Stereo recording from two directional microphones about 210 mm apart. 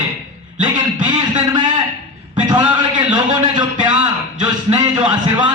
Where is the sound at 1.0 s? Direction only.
20° right (ahead or behind).